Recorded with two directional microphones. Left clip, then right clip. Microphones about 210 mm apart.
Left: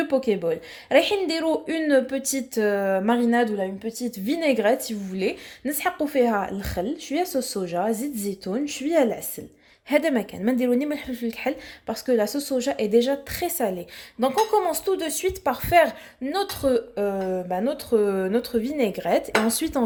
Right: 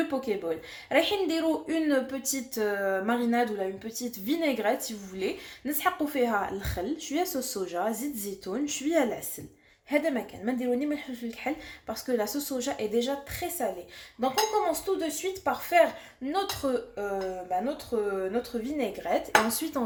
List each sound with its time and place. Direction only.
0.1 s speech: 35° left (ahead or behind)
9.9 s a woman's voice: 45° left (ahead or behind)